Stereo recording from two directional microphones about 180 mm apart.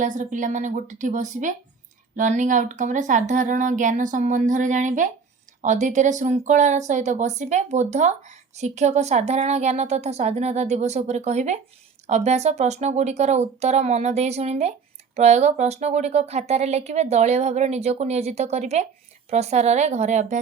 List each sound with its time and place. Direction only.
0.0 s speech: 45° right (ahead or behind)